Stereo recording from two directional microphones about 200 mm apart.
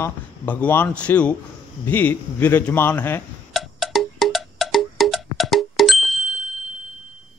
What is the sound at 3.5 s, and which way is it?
Music, centre (ahead or behind).